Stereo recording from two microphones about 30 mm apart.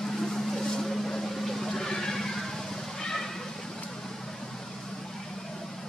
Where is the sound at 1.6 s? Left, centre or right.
Centre.